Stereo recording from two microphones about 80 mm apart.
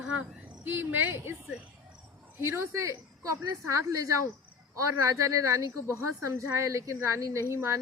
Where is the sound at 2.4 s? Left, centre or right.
Right.